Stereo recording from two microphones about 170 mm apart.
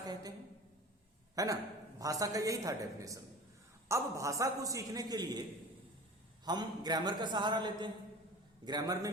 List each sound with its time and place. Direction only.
0.0 s a sound: 20° right (ahead or behind)
1.4 s a man's voice: 20° right (ahead or behind)
6.4 s a man's voice: 25° right (ahead or behind)